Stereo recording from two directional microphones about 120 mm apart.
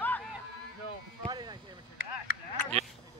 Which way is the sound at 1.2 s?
35° right (ahead or behind).